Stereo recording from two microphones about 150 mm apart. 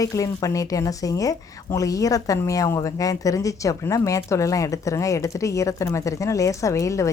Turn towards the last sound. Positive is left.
turn(degrees=20)  # may be behind; listen again after turning